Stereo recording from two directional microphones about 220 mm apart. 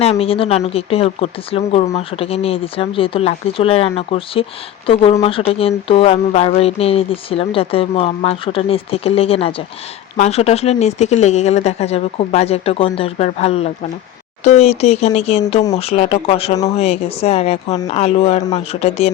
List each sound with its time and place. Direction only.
0.0 s speech: 25° left (ahead or behind)